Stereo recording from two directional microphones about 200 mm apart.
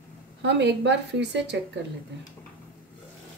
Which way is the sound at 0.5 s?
60° right (ahead or behind).